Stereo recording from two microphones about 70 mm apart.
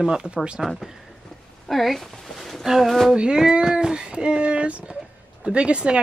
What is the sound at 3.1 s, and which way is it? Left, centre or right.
Speech, centre.